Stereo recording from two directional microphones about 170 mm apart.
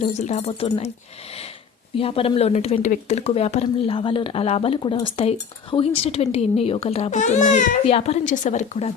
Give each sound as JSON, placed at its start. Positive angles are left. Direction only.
{"t": 0.2, "sound": "speech", "side_deg": 40}
{"t": 2.0, "sound": "speech", "side_deg": 35}
{"t": 7.9, "sound": "speech", "side_deg": 35}